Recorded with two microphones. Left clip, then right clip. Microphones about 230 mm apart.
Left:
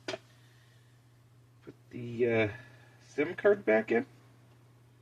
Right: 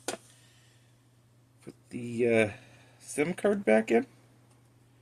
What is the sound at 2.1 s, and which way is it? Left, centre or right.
Speech, right.